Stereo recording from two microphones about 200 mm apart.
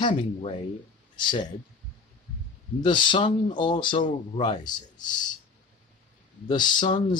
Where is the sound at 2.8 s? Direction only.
25° left (ahead or behind).